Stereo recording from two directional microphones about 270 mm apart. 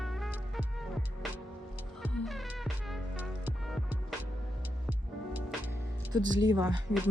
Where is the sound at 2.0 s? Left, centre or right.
Centre.